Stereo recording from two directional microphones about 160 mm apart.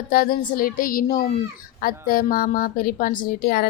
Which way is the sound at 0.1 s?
65° left (ahead or behind).